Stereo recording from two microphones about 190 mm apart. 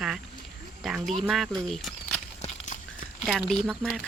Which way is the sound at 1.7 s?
5° left (ahead or behind).